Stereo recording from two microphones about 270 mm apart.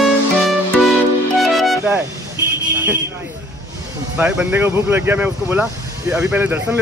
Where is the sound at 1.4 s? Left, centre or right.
Centre.